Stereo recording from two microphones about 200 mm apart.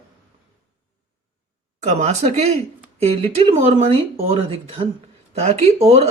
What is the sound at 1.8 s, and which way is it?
Speech, 35° right (ahead or behind).